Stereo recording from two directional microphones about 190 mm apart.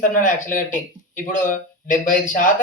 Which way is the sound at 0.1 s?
45° left (ahead or behind).